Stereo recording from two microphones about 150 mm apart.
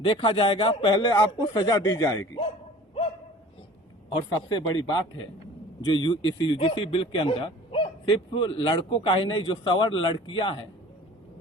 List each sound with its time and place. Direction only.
0.0 s speech: 35° left (ahead or behind)
4.1 s speech: 30° left (ahead or behind)